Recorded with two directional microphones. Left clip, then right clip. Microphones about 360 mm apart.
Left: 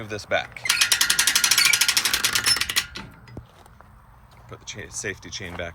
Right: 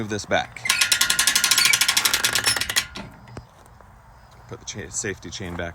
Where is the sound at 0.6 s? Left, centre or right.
Centre.